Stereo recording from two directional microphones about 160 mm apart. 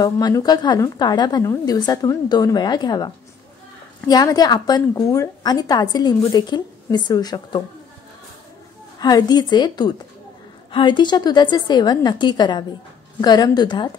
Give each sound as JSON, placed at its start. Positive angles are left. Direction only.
{"t": 0.0, "sound": "a woman's voice", "side_deg": 25}
{"t": 4.1, "sound": "a woman's voice", "side_deg": 25}
{"t": 9.0, "sound": "a woman's voice", "side_deg": 25}